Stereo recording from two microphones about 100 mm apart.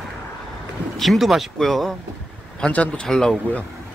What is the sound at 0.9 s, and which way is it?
Speech, centre (ahead or behind).